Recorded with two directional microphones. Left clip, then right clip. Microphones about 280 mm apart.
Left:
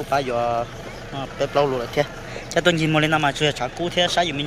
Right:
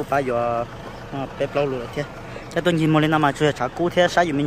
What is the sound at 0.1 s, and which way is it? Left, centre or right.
A man's voice, centre.